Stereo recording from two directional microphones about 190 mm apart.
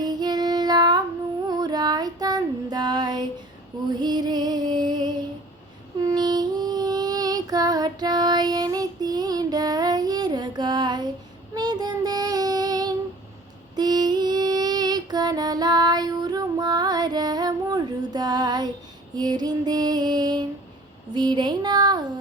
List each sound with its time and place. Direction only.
0.0 s child singing: 20° right (ahead or behind)
3.8 s music: 20° right (ahead or behind)
6.0 s child singing: 20° right (ahead or behind)
13.7 s music: 20° right (ahead or behind)
21.1 s a sound: 25° right (ahead or behind)